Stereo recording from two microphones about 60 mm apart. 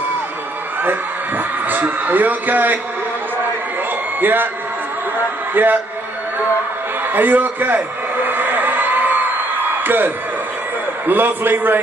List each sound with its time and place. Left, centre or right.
1.7 s speech: right
4.2 s speech: right
5.5 s a man's voice: right
7.2 s a sound: right
9.8 s speech: right